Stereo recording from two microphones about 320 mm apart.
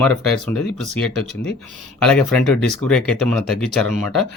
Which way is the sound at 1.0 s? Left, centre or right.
Left.